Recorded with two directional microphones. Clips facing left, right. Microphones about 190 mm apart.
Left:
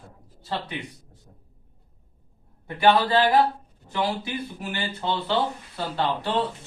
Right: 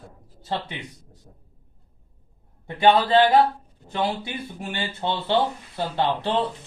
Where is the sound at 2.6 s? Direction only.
20° right (ahead or behind).